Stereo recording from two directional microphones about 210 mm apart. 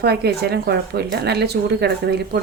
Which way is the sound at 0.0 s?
50° right (ahead or behind).